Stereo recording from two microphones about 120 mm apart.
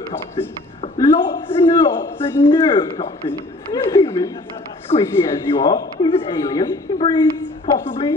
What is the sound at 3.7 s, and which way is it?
Speech, 30° left (ahead or behind).